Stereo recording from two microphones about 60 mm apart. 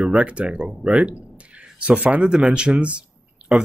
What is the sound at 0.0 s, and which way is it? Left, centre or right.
Speech, centre.